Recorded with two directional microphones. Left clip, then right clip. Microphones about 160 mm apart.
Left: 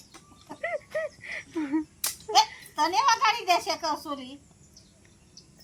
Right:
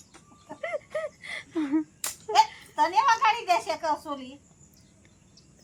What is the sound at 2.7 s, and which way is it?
A child's voice, 15° left (ahead or behind).